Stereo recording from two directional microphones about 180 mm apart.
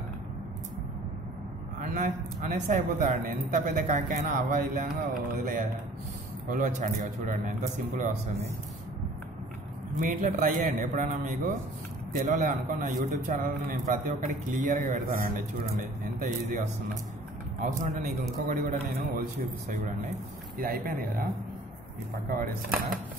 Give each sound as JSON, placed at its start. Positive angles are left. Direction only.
{"t": 1.8, "sound": "a man's voice", "side_deg": -45}
{"t": 9.9, "sound": "a man's voice", "side_deg": -50}